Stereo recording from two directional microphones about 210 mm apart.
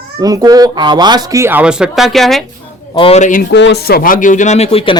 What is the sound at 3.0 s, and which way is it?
Speech, 30° left (ahead or behind).